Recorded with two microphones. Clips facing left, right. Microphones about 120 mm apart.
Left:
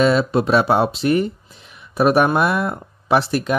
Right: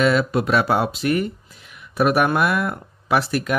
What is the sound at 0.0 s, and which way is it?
Speech, 30° left (ahead or behind).